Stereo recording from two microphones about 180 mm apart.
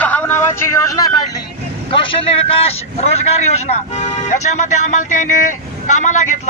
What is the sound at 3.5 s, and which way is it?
A man's voice, 35° left (ahead or behind).